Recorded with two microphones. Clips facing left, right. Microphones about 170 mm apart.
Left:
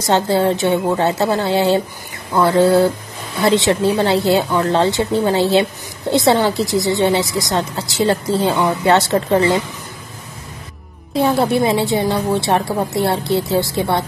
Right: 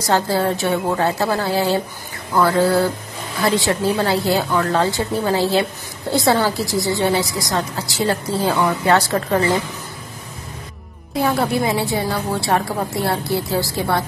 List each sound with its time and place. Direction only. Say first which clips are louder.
0.0 s a woman's voice: left 3 dB; 25° left (ahead or behind)
11.1 s a woman's voice: left 4 dB; 25° left (ahead or behind)